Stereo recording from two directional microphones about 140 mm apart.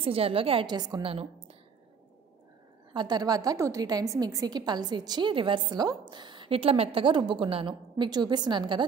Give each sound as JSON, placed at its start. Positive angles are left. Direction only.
{"t": 0.0, "sound": "a woman's voice", "side_deg": -40}
{"t": 2.9, "sound": "a woman's voice", "side_deg": -30}